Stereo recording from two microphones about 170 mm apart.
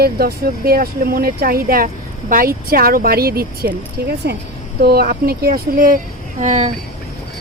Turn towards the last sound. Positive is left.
turn(degrees=-45)  # may be behind; listen again after turning